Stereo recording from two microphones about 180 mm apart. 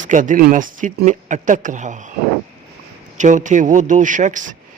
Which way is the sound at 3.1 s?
45° right (ahead or behind).